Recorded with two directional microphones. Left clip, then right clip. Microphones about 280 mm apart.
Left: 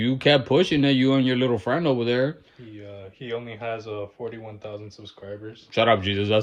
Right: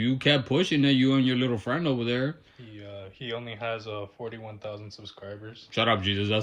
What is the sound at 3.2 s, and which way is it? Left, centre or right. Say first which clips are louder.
Speech: left 2 dB; centre.